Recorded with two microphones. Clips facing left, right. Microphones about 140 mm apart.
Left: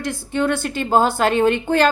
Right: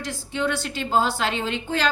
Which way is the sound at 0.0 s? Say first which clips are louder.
Left 5 dB; 50° left (ahead or behind).